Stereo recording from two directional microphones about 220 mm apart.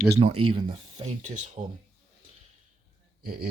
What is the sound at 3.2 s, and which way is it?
Speech, 40° right (ahead or behind).